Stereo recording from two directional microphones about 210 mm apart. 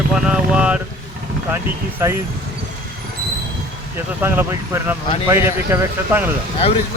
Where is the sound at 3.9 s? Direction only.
10° right (ahead or behind).